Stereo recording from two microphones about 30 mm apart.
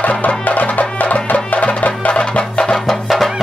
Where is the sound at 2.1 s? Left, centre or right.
Left.